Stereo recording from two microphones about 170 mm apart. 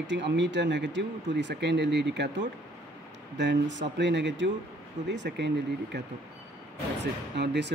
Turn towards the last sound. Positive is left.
turn(degrees=-90)